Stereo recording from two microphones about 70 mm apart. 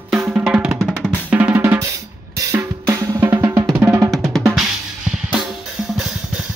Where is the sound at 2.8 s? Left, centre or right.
Right.